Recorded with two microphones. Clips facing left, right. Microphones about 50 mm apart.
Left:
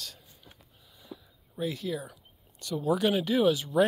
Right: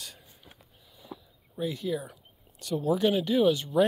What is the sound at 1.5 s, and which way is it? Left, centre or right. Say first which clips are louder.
Speech: right 2 dB; centre.